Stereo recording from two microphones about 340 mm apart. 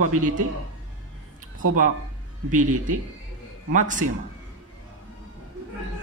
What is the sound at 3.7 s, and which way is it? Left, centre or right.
Speech, right.